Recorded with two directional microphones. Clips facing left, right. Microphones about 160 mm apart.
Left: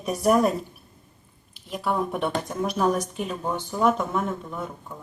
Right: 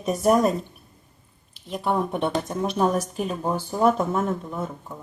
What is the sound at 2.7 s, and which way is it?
Speech, 25° right (ahead or behind).